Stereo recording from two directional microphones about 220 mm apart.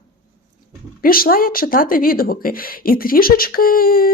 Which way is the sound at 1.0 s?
40° left (ahead or behind).